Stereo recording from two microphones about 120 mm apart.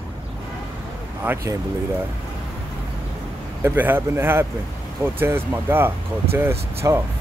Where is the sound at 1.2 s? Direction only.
20° right (ahead or behind).